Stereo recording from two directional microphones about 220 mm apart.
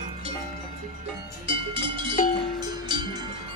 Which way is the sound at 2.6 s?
20° right (ahead or behind).